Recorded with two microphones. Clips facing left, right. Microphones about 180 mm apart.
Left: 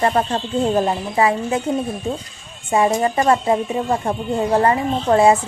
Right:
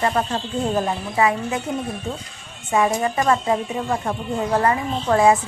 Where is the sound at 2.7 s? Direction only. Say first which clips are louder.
Left 3 dB; 30° left (ahead or behind).